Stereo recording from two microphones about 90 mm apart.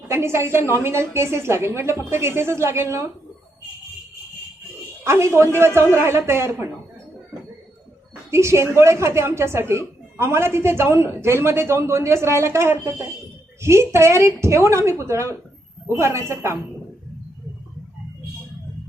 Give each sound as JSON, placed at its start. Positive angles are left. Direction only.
{"t": 0.1, "sound": "a woman's voice", "side_deg": -30}
{"t": 5.0, "sound": "a woman's voice", "side_deg": -30}
{"t": 8.3, "sound": "a woman's voice", "side_deg": -30}